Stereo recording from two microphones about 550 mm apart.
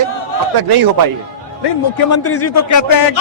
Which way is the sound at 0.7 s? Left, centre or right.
Right.